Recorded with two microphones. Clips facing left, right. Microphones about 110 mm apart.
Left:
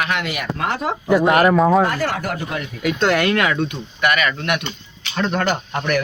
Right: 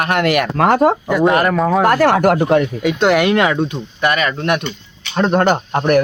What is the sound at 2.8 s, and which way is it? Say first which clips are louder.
Speech: right 4 dB; 20° right (ahead or behind).